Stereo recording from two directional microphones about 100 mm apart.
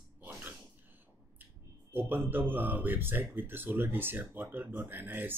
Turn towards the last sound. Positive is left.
turn(degrees=-20)  # may be behind; listen again after turning